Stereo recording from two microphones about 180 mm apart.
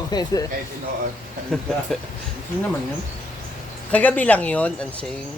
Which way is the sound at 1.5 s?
Centre (ahead or behind).